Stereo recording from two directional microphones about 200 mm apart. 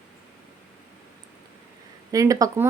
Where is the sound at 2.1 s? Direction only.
15° right (ahead or behind).